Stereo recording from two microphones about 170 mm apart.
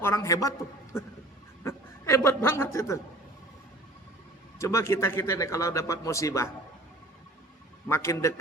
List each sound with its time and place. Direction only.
0.0 s speech: 15° left (ahead or behind)
1.6 s speech: 15° left (ahead or behind)
4.5 s speech: 15° left (ahead or behind)
7.9 s speech: 15° left (ahead or behind)